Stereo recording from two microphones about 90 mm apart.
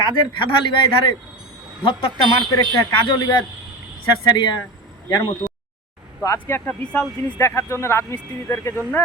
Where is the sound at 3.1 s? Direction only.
60° left (ahead or behind).